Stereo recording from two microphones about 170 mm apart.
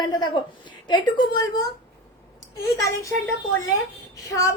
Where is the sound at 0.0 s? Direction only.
25° left (ahead or behind).